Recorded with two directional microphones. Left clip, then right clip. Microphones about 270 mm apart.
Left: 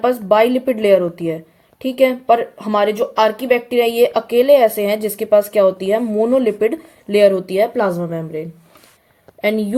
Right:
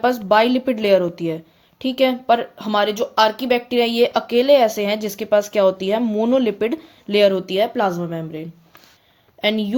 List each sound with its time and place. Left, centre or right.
0.0 s speech: right